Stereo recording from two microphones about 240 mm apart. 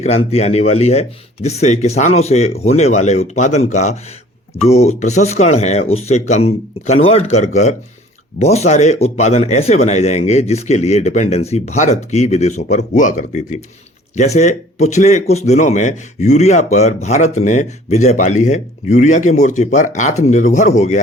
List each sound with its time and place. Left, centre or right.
0.0 s speech: left